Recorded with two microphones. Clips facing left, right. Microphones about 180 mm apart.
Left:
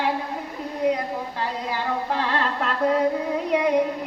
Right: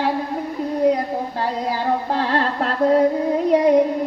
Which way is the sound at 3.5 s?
35° right (ahead or behind).